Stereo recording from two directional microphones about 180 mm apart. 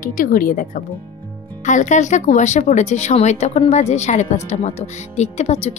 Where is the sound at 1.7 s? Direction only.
40° left (ahead or behind).